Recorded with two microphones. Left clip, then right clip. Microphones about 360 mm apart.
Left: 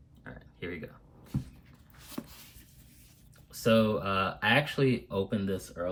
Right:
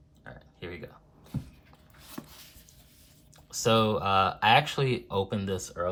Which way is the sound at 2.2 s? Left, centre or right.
Centre.